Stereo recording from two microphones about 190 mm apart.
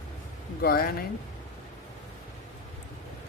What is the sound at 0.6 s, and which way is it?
Speech, 55° left (ahead or behind).